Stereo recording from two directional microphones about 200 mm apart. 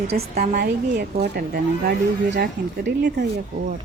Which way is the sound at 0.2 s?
35° right (ahead or behind).